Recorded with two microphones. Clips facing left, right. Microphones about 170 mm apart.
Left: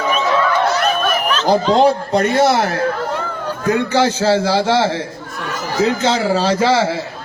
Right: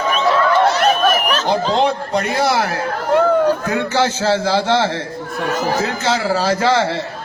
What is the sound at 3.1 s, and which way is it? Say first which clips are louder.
Run: right 10 dB; 55° right (ahead or behind).